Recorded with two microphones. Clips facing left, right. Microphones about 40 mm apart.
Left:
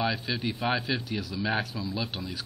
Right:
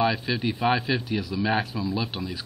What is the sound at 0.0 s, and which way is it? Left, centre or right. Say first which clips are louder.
Speech: right 5 dB; centre.